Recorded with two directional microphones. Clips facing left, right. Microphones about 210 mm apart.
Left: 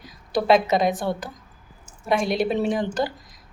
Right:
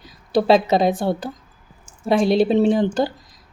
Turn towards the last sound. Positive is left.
turn(degrees=-30)  # may be behind; listen again after turning